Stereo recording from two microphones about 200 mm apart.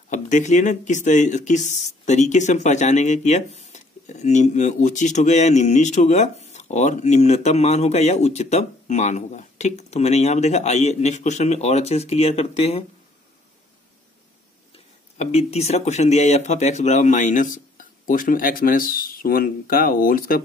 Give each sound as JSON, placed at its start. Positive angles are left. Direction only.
{"t": 0.1, "sound": "speech", "side_deg": 35}
{"t": 15.1, "sound": "speech", "side_deg": 35}